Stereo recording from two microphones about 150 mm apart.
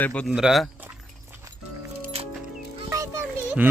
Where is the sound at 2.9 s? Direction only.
20° right (ahead or behind).